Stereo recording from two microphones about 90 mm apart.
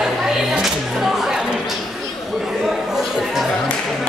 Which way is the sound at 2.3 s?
Centre (ahead or behind).